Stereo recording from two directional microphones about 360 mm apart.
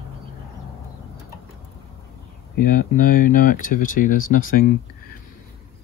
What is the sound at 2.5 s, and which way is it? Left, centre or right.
Speech, left.